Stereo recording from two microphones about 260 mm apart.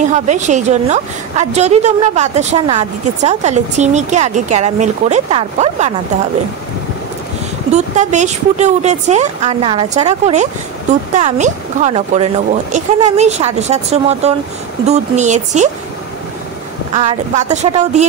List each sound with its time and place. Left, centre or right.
0.0 s a woman's voice: right
7.7 s a woman's voice: right
16.9 s a woman's voice: right